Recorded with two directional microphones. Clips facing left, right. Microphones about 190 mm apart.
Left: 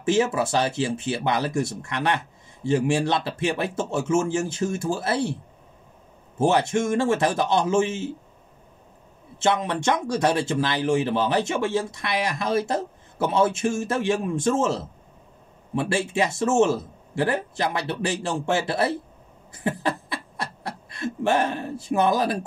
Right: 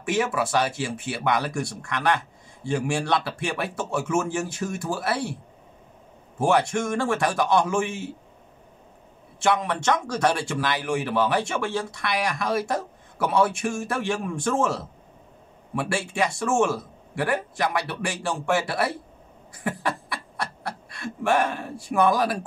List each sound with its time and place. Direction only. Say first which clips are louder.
0.0 s a man's voice: left 3 dB; 25° left (ahead or behind)
6.4 s a man's voice: left 1 dB; 20° left (ahead or behind)
9.4 s a man's voice: left 1 dB; 20° left (ahead or behind)
19.6 s beatboxing: left 2 dB; 25° left (ahead or behind)
20.9 s a man's voice: left 1 dB; 25° left (ahead or behind)